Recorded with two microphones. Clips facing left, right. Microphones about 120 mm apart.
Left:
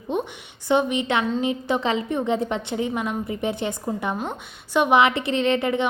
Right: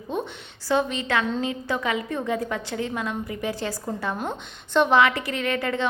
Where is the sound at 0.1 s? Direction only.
20° left (ahead or behind).